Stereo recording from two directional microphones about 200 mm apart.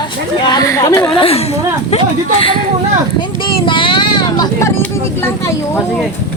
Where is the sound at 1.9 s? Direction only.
30° left (ahead or behind).